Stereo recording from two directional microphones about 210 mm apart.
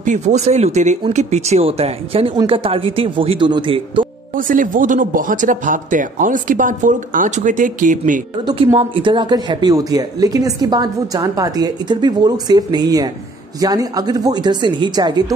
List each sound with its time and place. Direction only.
0.0 s speech: 35° right (ahead or behind)
4.4 s speech: 40° right (ahead or behind)
8.5 s speech: 25° right (ahead or behind)